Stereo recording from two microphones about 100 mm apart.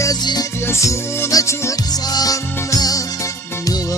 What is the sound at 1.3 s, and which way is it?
Music, 35° left (ahead or behind).